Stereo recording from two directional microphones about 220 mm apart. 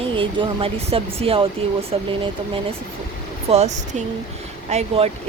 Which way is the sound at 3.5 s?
30° right (ahead or behind).